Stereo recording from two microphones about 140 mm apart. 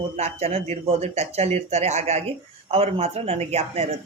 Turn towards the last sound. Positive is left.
turn(degrees=-50)  # may be behind; listen again after turning